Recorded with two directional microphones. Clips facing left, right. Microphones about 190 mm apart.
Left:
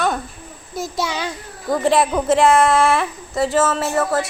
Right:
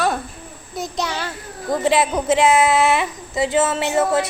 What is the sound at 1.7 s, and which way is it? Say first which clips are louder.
Speech: left 1 dB; centre (ahead or behind).